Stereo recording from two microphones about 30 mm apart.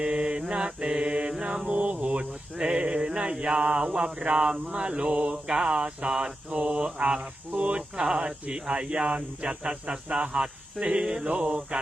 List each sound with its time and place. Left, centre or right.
0.0 s mantra: right
1.0 s mantra: right
1.3 s mantra: right
1.7 s a sound: right
2.6 s mantra: right
6.5 s mantra: right
11.0 s mantra: right
11.3 s mantra: right